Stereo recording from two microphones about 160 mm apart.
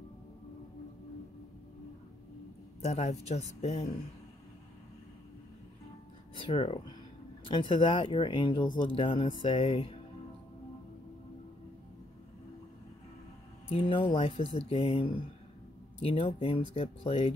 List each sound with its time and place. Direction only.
2.8 s speech: 45° left (ahead or behind)
6.3 s speech: 35° left (ahead or behind)
13.7 s speech: 30° left (ahead or behind)